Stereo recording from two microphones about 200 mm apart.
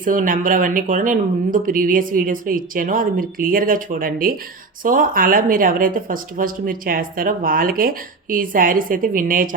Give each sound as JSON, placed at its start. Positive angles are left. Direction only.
{"t": 0.0, "sound": "speech", "side_deg": -40}